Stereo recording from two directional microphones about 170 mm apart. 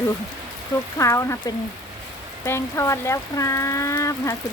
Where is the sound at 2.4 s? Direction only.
15° left (ahead or behind).